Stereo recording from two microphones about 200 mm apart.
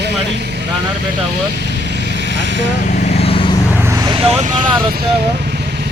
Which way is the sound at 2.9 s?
35° left (ahead or behind).